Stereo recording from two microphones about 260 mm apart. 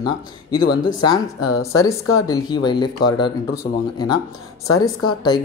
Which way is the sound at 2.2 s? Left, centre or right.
Centre.